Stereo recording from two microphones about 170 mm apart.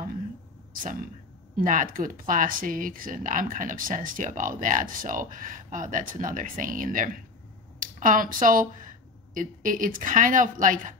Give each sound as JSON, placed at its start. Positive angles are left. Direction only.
{"t": 1.6, "sound": "speech", "side_deg": -50}